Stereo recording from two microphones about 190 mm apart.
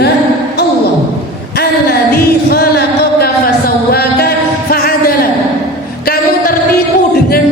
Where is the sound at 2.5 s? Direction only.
55° left (ahead or behind).